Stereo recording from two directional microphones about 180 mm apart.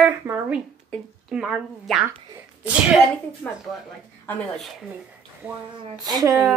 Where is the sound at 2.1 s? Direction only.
15° right (ahead or behind).